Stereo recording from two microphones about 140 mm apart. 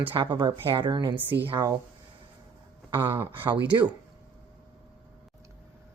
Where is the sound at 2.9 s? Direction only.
35° right (ahead or behind).